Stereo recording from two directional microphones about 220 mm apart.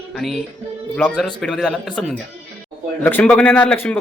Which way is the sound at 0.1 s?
Centre (ahead or behind).